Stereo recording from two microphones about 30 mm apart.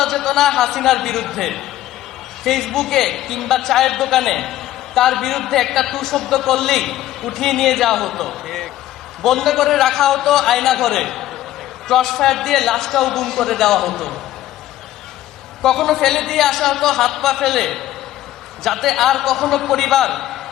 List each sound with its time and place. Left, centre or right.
0.0 s a man's voice: centre
15.6 s a man's voice: centre